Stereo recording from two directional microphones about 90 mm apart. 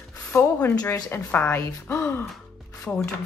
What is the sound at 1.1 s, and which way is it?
Speech, 25° left (ahead or behind).